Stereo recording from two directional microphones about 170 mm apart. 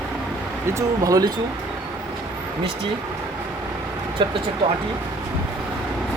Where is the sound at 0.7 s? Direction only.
20° right (ahead or behind).